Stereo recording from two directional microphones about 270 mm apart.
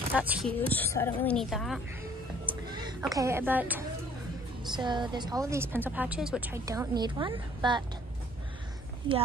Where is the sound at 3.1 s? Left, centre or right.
Centre.